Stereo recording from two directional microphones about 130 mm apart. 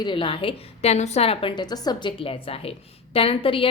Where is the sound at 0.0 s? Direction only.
40° left (ahead or behind).